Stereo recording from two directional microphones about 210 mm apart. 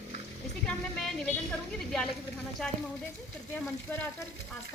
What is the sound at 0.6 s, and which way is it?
A woman's voice, 5° left (ahead or behind).